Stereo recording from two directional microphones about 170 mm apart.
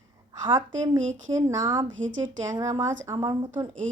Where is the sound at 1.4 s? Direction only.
20° right (ahead or behind).